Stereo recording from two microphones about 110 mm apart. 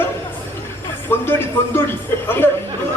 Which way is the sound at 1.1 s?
20° left (ahead or behind).